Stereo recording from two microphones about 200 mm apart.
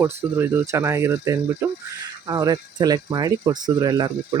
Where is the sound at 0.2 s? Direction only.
10° right (ahead or behind).